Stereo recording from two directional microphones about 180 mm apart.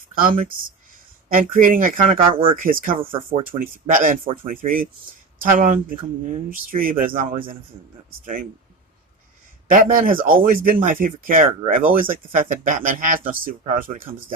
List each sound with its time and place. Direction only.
0.3 s speech: 50° right (ahead or behind)
2.3 s speech: 30° right (ahead or behind)
2.6 s speech: 50° right (ahead or behind)
3.0 s speech: 30° right (ahead or behind)
3.6 s speech: 50° right (ahead or behind)
9.6 s speech: 50° right (ahead or behind)